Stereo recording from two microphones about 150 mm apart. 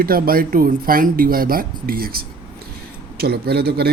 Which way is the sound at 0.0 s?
75° right (ahead or behind).